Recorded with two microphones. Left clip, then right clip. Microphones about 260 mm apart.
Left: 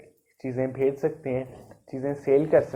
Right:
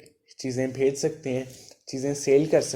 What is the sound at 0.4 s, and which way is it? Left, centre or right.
Speech, right.